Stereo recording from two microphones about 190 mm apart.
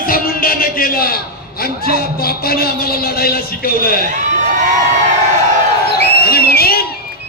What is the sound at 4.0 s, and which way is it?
Speech, 40° right (ahead or behind).